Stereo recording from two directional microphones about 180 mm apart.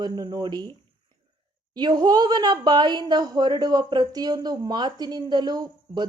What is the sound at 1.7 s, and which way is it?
A woman's voice, 25° right (ahead or behind).